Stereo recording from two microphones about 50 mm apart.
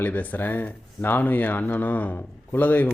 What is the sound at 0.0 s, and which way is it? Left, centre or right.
A man's voice, left.